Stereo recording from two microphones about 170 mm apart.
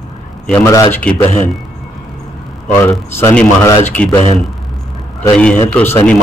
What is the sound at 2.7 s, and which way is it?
Speech, 15° left (ahead or behind).